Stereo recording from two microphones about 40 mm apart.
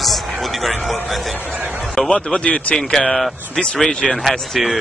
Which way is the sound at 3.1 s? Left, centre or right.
Centre.